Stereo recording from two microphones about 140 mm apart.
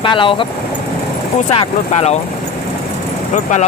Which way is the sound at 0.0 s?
35° left (ahead or behind).